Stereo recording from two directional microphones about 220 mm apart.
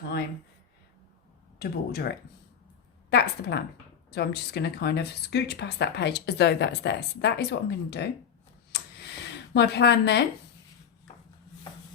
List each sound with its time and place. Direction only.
1.5 s speech: 45° left (ahead or behind)
8.7 s a sound: 50° left (ahead or behind)
9.6 s speech: 50° left (ahead or behind)